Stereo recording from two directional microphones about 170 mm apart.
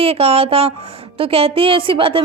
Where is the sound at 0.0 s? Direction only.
35° right (ahead or behind).